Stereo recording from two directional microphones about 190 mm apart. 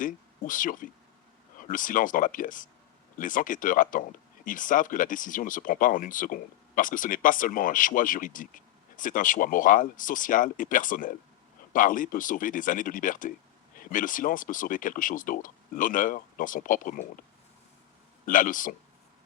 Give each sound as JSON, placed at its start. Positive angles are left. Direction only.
{"t": 0.0, "sound": "speech", "side_deg": 45}
{"t": 18.3, "sound": "speech", "side_deg": 45}